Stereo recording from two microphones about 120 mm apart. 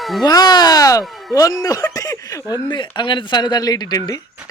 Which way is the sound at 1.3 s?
30° left (ahead or behind).